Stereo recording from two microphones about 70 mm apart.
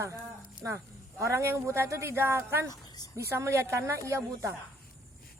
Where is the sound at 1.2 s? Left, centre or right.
Right.